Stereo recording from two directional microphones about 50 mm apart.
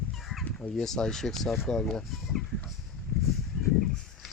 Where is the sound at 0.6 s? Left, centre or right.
Centre.